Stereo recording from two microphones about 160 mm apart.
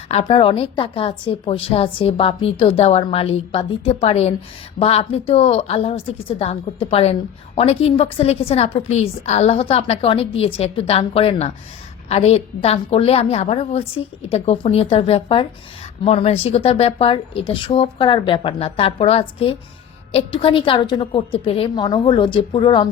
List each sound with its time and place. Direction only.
0.1 s a woman's voice: 40° left (ahead or behind)